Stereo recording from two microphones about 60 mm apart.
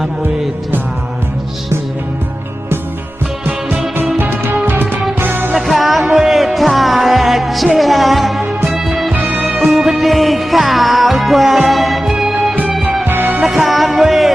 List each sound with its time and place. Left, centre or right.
4.2 s music: right
5.5 s music: centre
9.1 s music: right
9.6 s music: centre
13.1 s music: right
13.4 s music: centre